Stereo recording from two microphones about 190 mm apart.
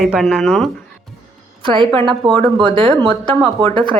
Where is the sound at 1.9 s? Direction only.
5° left (ahead or behind).